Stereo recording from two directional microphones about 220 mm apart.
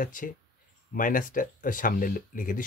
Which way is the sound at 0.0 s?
35° left (ahead or behind).